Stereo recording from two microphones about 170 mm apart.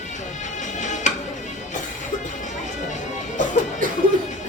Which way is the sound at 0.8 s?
45° left (ahead or behind).